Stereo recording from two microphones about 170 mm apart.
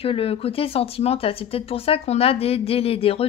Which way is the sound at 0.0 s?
35° left (ahead or behind).